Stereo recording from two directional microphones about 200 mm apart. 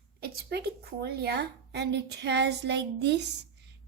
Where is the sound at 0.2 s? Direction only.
50° right (ahead or behind).